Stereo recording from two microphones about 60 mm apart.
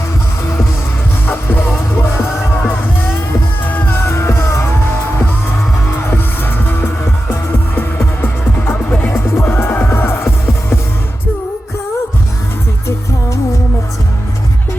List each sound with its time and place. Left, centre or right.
1.3 s music: left
6.0 s music: left
8.9 s music: left
9.1 s music: left